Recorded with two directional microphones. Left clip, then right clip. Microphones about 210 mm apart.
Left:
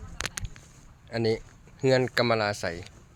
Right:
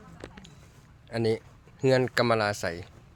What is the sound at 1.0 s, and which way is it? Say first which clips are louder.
Speech: even; centre (ahead or behind).